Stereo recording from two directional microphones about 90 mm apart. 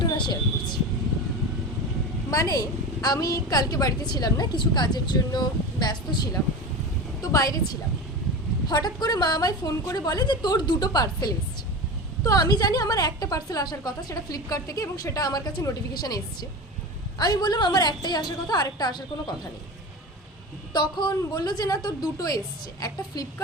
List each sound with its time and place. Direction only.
0.0 s a sound: 55° left (ahead or behind)
2.3 s a woman's voice: 40° left (ahead or behind)
20.7 s a woman's voice: 50° left (ahead or behind)